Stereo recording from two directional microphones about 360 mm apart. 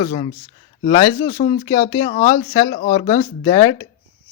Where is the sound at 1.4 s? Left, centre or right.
Centre.